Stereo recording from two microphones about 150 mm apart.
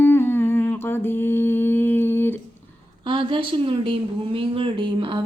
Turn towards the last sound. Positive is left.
turn(degrees=-35)  # may be behind; listen again after turning